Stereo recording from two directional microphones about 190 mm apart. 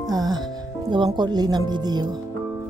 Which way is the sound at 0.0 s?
20° right (ahead or behind).